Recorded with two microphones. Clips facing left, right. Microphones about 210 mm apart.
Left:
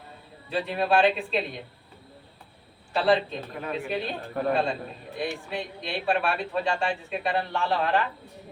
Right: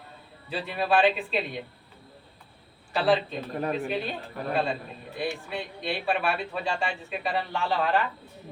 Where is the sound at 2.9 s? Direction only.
Centre (ahead or behind).